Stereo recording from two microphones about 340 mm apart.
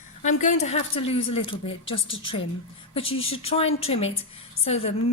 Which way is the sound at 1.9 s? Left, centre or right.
Left.